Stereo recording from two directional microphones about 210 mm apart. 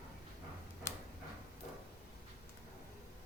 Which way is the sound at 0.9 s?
15° left (ahead or behind).